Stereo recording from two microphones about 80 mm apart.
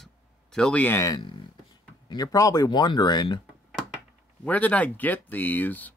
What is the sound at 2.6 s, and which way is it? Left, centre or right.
Speech, left.